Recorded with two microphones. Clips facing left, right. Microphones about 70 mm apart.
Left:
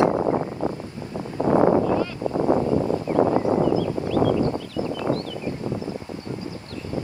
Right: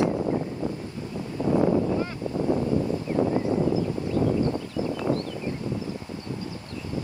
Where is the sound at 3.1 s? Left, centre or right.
Left.